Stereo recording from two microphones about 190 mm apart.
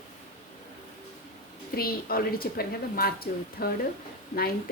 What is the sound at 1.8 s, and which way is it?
Speech, 50° left (ahead or behind).